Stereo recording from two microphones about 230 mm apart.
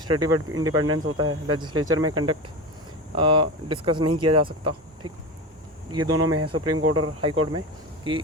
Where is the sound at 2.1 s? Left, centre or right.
Centre.